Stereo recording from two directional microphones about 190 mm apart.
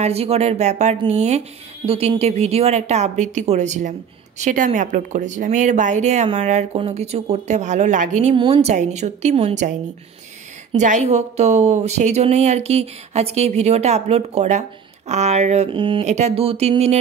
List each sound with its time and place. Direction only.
0.0 s speech: 30° right (ahead or behind)
10.7 s speech: 40° right (ahead or behind)